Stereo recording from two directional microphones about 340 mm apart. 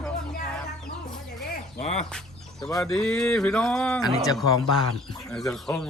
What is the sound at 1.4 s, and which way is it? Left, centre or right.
Speech, left.